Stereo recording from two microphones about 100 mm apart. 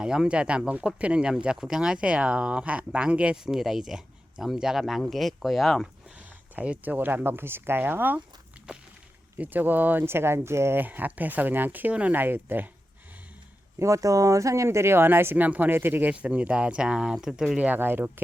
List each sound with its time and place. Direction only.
0.0 s speech: 10° right (ahead or behind)
6.1 s speech: 15° right (ahead or behind)
9.4 s speech: 20° right (ahead or behind)
13.7 s speech: 30° right (ahead or behind); by 17.7 s 5° right (ahead or behind)
17.7 s speech: 20° right (ahead or behind)